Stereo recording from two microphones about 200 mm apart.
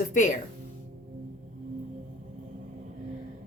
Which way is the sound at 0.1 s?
40° left (ahead or behind).